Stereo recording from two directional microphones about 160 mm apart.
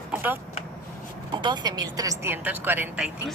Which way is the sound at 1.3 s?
25° right (ahead or behind).